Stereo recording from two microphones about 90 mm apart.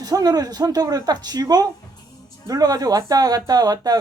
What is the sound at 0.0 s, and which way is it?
Speech, 45° right (ahead or behind).